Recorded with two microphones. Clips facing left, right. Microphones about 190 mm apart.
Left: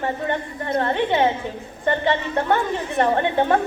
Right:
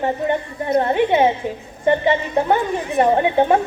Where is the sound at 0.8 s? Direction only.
15° right (ahead or behind).